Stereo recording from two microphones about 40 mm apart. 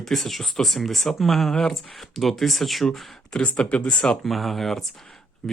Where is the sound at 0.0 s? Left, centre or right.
Centre.